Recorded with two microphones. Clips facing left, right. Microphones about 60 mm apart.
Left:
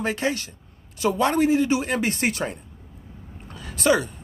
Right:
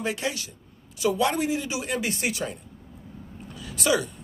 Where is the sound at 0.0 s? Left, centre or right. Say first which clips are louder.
Left 4 dB; left.